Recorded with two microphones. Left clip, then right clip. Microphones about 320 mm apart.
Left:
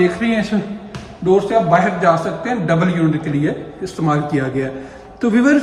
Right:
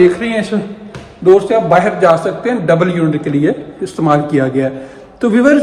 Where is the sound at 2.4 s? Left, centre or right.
Centre.